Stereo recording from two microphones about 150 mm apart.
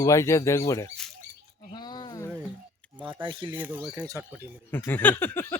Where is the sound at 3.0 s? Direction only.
35° right (ahead or behind).